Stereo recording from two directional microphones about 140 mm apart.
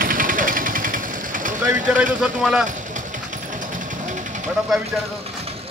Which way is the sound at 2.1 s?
5° right (ahead or behind).